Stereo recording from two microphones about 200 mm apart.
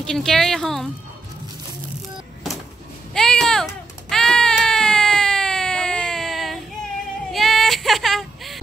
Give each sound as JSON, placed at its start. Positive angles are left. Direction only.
{"t": 0.0, "sound": "speech", "side_deg": 5}
{"t": 3.1, "sound": "baby cry", "side_deg": 5}
{"t": 7.3, "sound": "child singing", "side_deg": 0}